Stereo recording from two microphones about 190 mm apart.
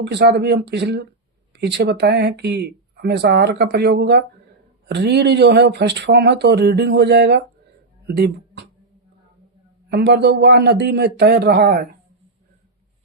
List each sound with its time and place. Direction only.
0.0 s speech: 65° right (ahead or behind)
9.9 s speech: 65° right (ahead or behind)